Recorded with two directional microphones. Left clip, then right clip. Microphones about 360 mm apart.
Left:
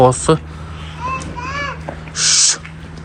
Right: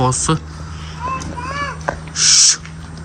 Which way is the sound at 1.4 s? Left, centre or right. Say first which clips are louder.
Even; right.